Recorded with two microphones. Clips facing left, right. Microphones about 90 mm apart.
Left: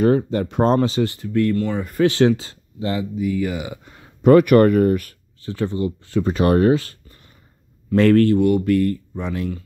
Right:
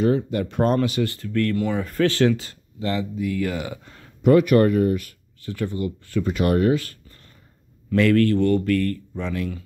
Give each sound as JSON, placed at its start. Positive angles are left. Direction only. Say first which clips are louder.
{"t": 0.0, "sound": "speech", "louder": "left 3 dB", "side_deg": 40}
{"t": 0.5, "sound": "speech", "louder": "left 3 dB", "side_deg": 25}
{"t": 1.6, "sound": "speech", "louder": "left 2 dB", "side_deg": 0}
{"t": 2.0, "sound": "speech", "louder": "left 4 dB", "side_deg": 25}
{"t": 3.2, "sound": "speech", "louder": "left 2 dB", "side_deg": 5}
{"t": 4.2, "sound": "speech", "louder": "left 4 dB", "side_deg": 50}
{"t": 5.4, "sound": "speech", "louder": "left 4 dB", "side_deg": 25}
{"t": 8.0, "sound": "speech", "louder": "left 4 dB", "side_deg": 35}
{"t": 8.3, "sound": "speech", "louder": "left 3 dB", "side_deg": 15}